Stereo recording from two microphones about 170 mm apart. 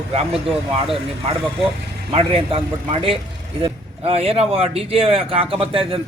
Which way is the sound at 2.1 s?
35° right (ahead or behind).